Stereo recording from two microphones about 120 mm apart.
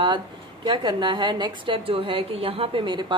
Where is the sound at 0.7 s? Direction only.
40° right (ahead or behind).